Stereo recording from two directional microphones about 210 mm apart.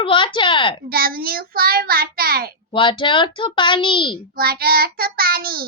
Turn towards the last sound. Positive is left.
turn(degrees=-45)  # may be behind; listen again after turning